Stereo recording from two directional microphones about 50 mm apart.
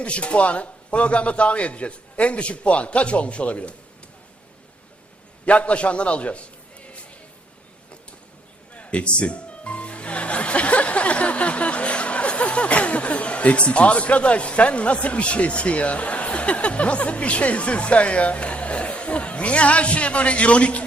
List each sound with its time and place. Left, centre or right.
0.0 s speech: left
5.5 s speech: left
8.7 s speech: left